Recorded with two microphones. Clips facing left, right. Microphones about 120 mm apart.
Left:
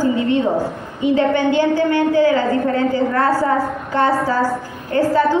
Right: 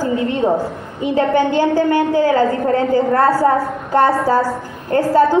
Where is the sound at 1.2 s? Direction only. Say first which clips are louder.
Right 3 dB; 40° right (ahead or behind).